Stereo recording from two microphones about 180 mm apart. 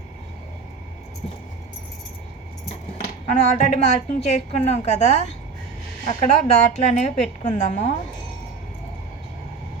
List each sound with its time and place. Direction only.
3.5 s a woman's voice: 40° left (ahead or behind)